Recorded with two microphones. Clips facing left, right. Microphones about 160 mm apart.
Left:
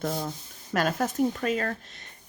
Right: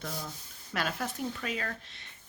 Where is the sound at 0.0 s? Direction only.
45° left (ahead or behind).